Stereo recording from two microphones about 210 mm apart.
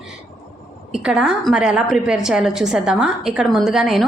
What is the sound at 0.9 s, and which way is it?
A woman's voice, 5° right (ahead or behind).